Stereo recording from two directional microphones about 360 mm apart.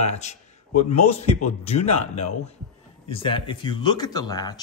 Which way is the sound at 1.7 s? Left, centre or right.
Centre.